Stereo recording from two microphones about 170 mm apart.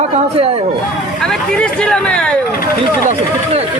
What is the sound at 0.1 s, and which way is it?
Speech, 35° right (ahead or behind).